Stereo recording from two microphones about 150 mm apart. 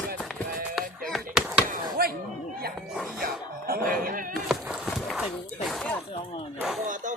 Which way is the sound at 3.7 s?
80° right.